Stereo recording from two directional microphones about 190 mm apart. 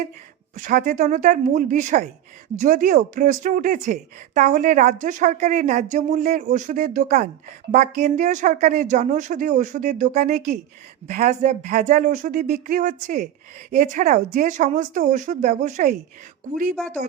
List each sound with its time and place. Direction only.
0.5 s a woman's voice: 45° right (ahead or behind)